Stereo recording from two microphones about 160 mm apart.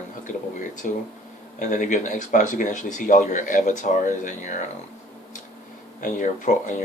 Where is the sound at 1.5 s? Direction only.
50° left (ahead or behind).